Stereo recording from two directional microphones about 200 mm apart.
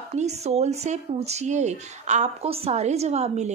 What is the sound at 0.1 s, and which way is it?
A woman's voice, 35° right (ahead or behind).